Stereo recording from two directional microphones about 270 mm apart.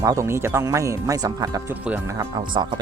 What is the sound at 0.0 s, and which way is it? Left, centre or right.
Speech, centre.